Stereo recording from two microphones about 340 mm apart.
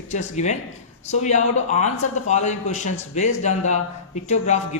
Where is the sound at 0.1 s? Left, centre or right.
Left.